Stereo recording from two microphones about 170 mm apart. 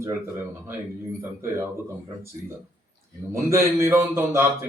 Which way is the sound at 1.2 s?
15° right (ahead or behind).